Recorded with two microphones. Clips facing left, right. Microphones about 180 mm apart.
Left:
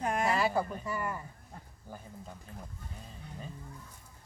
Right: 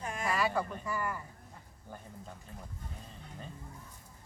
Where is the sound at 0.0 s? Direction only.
65° left (ahead or behind).